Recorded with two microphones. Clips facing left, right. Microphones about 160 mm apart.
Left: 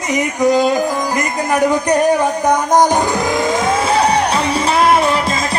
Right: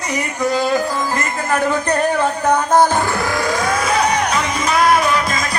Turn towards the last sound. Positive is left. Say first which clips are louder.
# left 2 dB
turn(degrees=30)  # may be behind; listen again after turning